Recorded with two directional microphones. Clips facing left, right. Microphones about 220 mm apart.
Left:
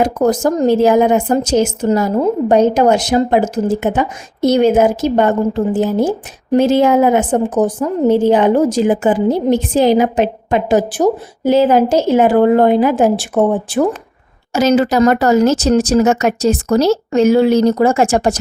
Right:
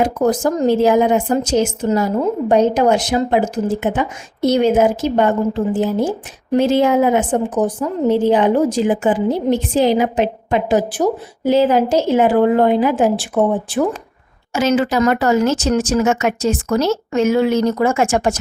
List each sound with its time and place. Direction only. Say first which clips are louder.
0.0 s speech: left 2 dB; 40° left (ahead or behind)